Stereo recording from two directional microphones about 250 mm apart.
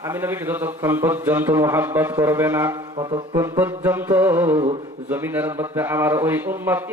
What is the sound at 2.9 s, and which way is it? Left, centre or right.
Music, centre.